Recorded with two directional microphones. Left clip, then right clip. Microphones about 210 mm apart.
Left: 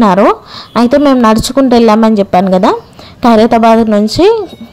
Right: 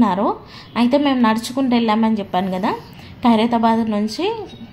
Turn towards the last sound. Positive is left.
turn(degrees=40)  # may be behind; listen again after turning